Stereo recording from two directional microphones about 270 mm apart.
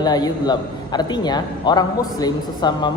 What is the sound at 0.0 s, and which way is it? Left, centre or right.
A man's voice, centre.